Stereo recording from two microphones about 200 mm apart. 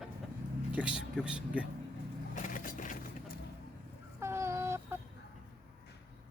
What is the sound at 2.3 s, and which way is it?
Vehicle, 40° left (ahead or behind).